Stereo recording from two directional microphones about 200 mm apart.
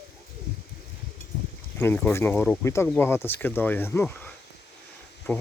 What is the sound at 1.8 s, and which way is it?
Speech, 10° left (ahead or behind).